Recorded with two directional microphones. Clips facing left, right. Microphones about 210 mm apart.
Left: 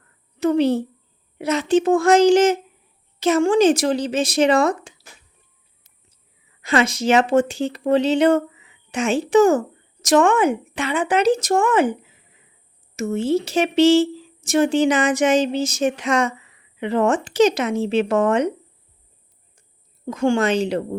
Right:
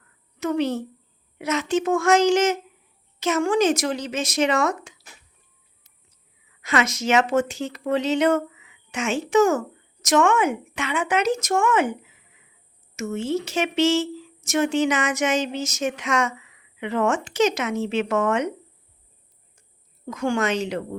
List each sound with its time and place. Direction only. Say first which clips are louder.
0.3 s speech: left 6 dB; 30° left (ahead or behind)
6.6 s speech: left 4 dB; 30° left (ahead or behind)
20.1 s speech: left 5 dB; 30° left (ahead or behind)